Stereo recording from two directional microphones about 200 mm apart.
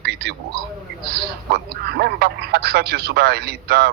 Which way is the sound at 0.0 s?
55° right (ahead or behind).